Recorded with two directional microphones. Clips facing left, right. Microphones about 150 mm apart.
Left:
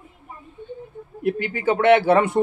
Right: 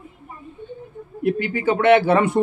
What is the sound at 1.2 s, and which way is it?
Speech, 35° left (ahead or behind).